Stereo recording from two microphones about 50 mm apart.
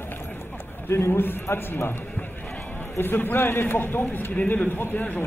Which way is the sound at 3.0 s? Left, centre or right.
Left.